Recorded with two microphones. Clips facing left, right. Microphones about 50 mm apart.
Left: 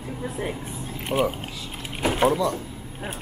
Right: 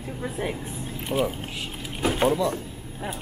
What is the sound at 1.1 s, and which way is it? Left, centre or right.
Speech, centre.